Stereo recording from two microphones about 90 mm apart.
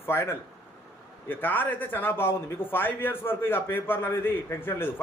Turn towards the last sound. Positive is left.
turn(degrees=25)  # may be behind; listen again after turning